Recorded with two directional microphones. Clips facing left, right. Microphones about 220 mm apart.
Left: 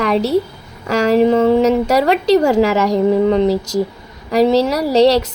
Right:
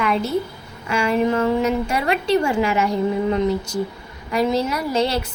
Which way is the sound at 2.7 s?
90° left.